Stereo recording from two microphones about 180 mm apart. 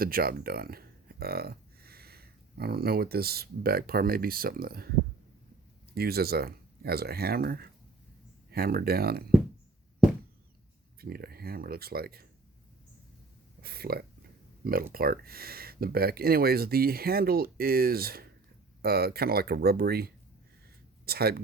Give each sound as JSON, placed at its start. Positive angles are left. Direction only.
{"t": 0.0, "sound": "speech", "side_deg": -55}
{"t": 5.9, "sound": "speech", "side_deg": -60}
{"t": 11.0, "sound": "speech", "side_deg": -55}
{"t": 13.6, "sound": "speech", "side_deg": -60}